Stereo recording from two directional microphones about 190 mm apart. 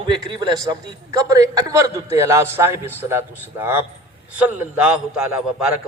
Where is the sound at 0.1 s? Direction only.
25° right (ahead or behind).